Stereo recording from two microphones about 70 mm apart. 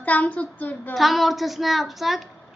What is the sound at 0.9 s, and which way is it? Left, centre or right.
A woman's voice, centre.